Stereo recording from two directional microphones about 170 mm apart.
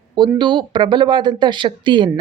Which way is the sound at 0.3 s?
25° right (ahead or behind).